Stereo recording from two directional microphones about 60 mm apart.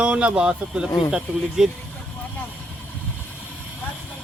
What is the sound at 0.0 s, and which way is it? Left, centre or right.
Speech, centre.